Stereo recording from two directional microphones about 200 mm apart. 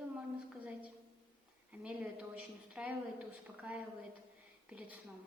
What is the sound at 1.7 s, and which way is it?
A woman's voice, 5° right (ahead or behind).